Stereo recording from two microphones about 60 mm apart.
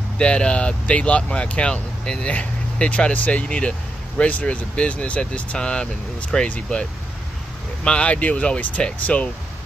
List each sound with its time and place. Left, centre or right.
0.2 s speech: centre